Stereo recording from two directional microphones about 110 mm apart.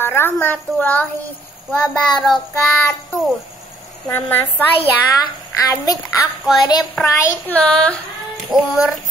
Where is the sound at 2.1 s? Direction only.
5° left (ahead or behind).